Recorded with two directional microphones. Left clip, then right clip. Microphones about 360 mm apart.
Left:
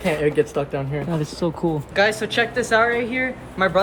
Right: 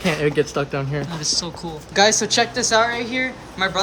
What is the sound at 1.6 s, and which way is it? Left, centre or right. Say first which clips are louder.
Speech: even; centre.